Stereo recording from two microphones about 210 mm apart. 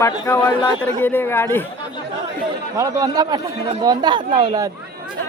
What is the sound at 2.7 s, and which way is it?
Speech, 15° right (ahead or behind).